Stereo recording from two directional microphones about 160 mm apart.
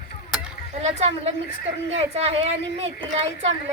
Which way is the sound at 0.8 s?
45° right (ahead or behind).